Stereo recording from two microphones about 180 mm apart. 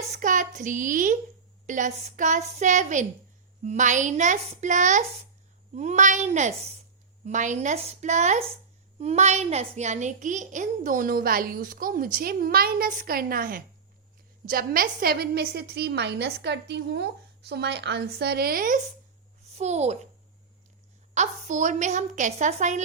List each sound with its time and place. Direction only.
0.2 s a child's voice: 45° right (ahead or behind)
19.5 s a woman's voice: 40° right (ahead or behind)
21.2 s a woman's voice: 45° right (ahead or behind)